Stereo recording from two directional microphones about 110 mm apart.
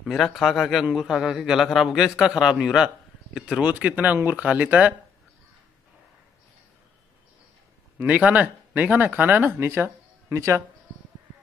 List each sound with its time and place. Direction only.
0.0 s a man's voice: centre (ahead or behind)
8.0 s speech: 15° right (ahead or behind)